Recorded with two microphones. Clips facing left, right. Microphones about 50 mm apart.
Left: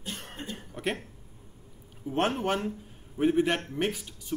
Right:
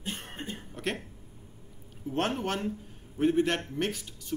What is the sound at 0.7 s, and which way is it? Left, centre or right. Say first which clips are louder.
Speech: left 2 dB; centre.